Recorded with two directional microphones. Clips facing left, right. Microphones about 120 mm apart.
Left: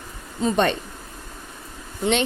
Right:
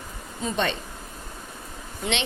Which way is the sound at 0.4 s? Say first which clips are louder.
Left 6 dB; 45° left (ahead or behind).